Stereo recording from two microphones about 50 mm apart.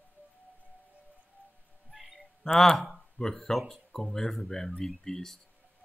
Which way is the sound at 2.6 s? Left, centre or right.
Centre.